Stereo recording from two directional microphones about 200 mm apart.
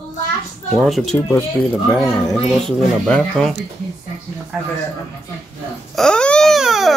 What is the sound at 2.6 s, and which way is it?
Speech, centre (ahead or behind).